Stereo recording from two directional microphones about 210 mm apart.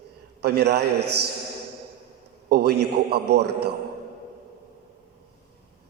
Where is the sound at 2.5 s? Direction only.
50° right (ahead or behind).